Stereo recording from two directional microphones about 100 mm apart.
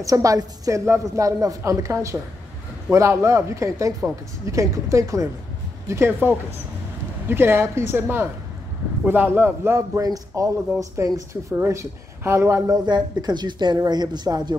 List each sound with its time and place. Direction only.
0.0 s a woman's voice: 35° right (ahead or behind)